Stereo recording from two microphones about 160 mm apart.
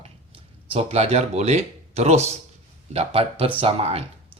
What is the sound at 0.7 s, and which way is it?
Speech, 40° right (ahead or behind).